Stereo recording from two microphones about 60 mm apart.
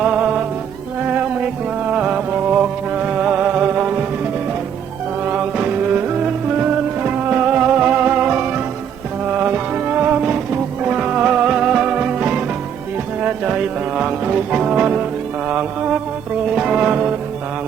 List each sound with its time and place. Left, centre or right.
0.0 s music: centre
1.9 s music: centre
6.6 s music: right
16.6 s music: centre